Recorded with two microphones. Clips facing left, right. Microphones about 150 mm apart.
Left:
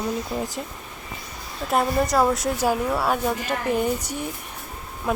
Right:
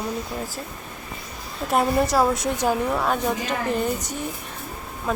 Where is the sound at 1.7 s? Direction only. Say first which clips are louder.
Right 1 dB; centre (ahead or behind).